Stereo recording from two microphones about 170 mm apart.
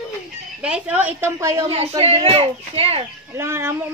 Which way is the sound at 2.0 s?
35° right (ahead or behind).